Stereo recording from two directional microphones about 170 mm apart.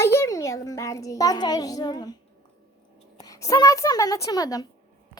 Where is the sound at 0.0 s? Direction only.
15° left (ahead or behind).